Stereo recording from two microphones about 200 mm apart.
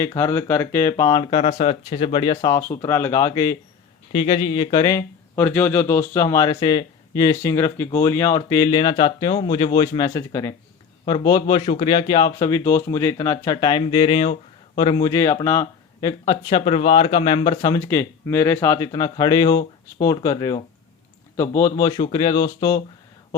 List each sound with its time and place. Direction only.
0.0 s speech: 15° left (ahead or behind)